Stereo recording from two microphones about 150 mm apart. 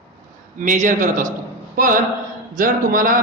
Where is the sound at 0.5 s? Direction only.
60° right (ahead or behind).